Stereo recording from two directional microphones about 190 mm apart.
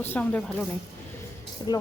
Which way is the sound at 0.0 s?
10° left (ahead or behind).